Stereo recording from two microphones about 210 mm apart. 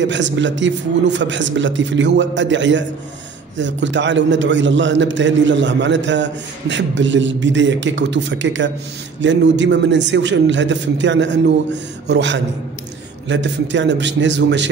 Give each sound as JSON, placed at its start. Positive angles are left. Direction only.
{"t": 0.0, "sound": "a man's voice", "side_deg": -60}